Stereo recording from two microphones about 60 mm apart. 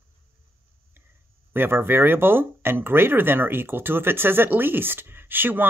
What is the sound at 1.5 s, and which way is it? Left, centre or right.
Speech, right.